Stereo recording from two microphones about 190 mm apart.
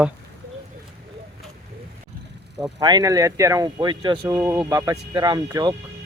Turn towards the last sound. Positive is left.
turn(degrees=-20)  # may be behind; listen again after turning